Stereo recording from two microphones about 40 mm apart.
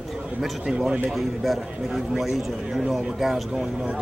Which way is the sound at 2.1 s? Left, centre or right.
Centre.